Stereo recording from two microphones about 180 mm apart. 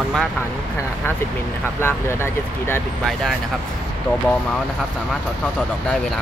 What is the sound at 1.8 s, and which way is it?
Speech, 15° left (ahead or behind).